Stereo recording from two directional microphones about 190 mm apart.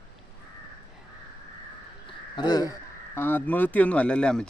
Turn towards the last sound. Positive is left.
turn(degrees=5)  # may be behind; listen again after turning